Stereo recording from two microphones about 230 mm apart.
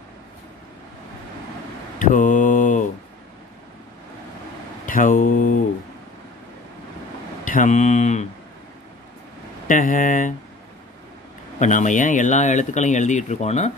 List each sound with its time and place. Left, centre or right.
2.0 s mantra: left
4.8 s speech: left
7.4 s speech: left
9.7 s speech: left
11.6 s speech: left